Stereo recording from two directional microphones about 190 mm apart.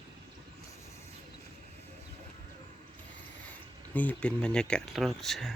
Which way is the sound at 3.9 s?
10° left (ahead or behind).